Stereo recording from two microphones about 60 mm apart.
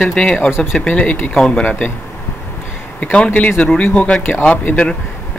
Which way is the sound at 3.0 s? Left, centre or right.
Left.